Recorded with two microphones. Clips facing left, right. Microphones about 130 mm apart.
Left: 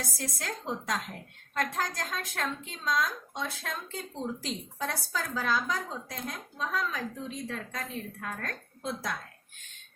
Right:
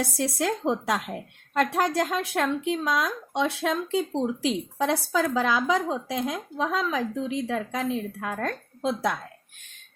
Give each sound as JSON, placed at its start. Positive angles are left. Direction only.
{"t": 0.4, "sound": "speech", "side_deg": -70}